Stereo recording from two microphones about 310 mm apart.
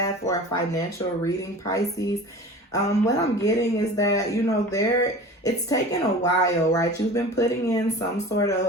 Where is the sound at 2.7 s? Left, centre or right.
Centre.